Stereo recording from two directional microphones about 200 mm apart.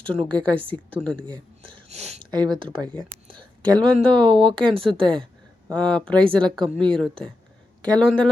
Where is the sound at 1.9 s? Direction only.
35° right (ahead or behind).